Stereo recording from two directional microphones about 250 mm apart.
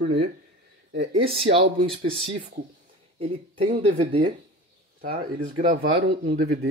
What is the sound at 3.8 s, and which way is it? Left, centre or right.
Speech, right.